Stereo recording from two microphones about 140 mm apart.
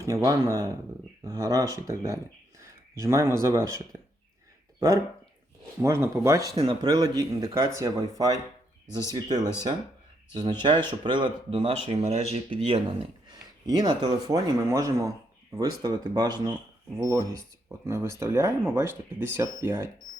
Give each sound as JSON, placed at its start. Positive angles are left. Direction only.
{"t": 0.0, "sound": "speech", "side_deg": -25}
{"t": 5.8, "sound": "speech", "side_deg": -20}
{"t": 13.3, "sound": "speech", "side_deg": -30}